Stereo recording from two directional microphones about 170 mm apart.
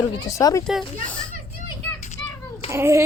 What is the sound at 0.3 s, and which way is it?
Speech, 20° left (ahead or behind).